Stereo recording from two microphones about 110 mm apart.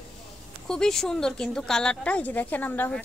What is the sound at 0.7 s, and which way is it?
A woman's voice, 5° left (ahead or behind).